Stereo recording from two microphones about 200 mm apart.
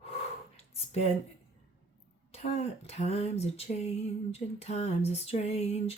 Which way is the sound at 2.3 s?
30° left (ahead or behind).